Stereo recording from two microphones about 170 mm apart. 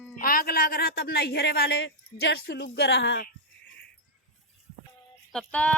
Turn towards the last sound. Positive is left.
turn(degrees=5)  # may be behind; listen again after turning